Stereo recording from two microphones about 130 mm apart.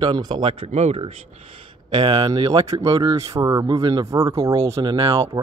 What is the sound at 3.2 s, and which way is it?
Speech, 25° right (ahead or behind).